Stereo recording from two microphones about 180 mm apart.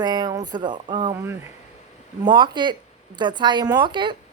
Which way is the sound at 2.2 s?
25° right (ahead or behind).